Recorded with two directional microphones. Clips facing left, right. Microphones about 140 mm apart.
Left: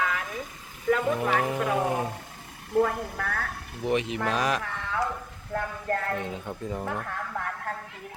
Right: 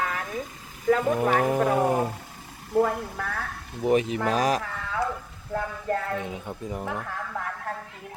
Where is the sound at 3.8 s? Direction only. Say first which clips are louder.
Right 4 dB; 40° right (ahead or behind).